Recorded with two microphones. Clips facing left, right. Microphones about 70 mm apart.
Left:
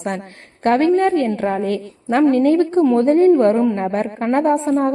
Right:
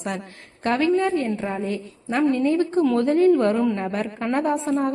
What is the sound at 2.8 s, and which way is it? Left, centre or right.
A woman's voice, left.